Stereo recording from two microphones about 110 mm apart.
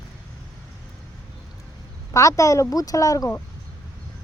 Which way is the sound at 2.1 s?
30° left (ahead or behind).